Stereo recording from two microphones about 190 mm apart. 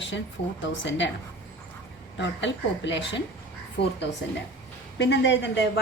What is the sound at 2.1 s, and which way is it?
A woman's voice, 70° left (ahead or behind).